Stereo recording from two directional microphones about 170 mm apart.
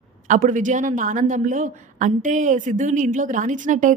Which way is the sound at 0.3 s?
50° right (ahead or behind).